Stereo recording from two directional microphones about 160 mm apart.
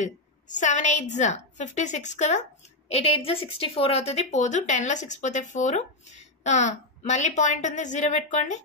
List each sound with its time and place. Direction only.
0.5 s speech: 50° left (ahead or behind)